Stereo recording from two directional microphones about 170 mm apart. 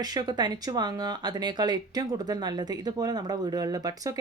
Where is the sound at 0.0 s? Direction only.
25° right (ahead or behind).